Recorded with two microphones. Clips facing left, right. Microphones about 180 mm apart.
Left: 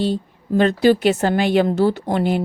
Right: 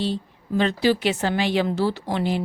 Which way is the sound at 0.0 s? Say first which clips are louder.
Left 5 dB; 50° left (ahead or behind).